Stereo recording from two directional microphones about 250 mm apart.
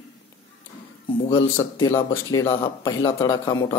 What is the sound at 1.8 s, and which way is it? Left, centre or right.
Speech, centre.